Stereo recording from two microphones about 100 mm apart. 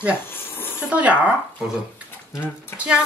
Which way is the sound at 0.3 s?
20° left (ahead or behind).